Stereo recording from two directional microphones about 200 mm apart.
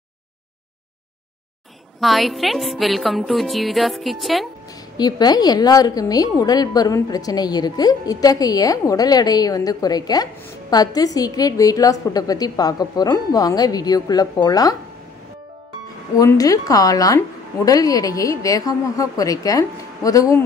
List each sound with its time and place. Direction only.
2.0 s music: centre (ahead or behind)
4.9 s a woman's voice: 20° left (ahead or behind)
16.2 s a woman's voice: 15° left (ahead or behind)